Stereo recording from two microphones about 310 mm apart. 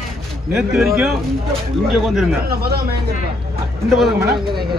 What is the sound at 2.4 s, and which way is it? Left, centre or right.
Speech, right.